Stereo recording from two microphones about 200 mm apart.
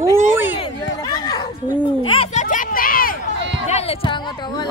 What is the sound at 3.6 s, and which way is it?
Speech, 30° left (ahead or behind).